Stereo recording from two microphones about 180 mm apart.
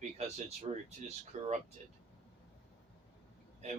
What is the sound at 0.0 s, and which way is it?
Speech, 40° right (ahead or behind).